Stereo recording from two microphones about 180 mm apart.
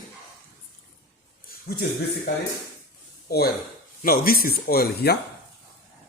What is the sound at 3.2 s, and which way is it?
A man's voice, 60° left (ahead or behind).